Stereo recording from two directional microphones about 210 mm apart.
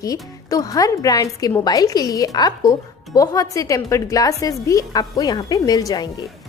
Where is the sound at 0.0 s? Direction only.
15° left (ahead or behind).